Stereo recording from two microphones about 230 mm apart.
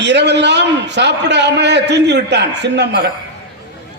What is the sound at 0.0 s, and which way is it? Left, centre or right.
A man's voice, right.